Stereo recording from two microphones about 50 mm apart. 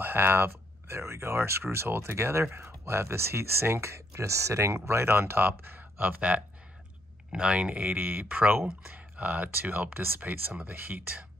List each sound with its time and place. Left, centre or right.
0.0 s speech: right
5.5 s speech: right
7.9 s speech: right
10.5 s speech: right